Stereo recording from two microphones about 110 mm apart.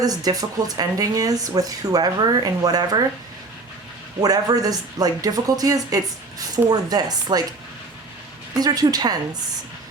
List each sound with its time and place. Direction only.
0.0 s speech: 35° right (ahead or behind)
4.2 s speech: 35° right (ahead or behind)
8.5 s speech: 35° right (ahead or behind)